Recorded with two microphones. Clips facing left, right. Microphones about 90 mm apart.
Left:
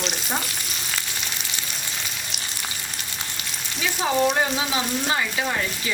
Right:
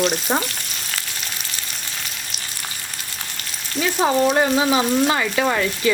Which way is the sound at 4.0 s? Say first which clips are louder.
Right 6 dB; 55° right (ahead or behind).